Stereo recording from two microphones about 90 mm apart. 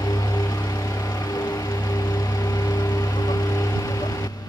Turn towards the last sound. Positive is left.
turn(degrees=40)  # may be behind; listen again after turning